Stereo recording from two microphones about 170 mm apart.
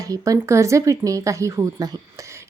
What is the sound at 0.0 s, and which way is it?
A woman's voice, 20° right (ahead or behind).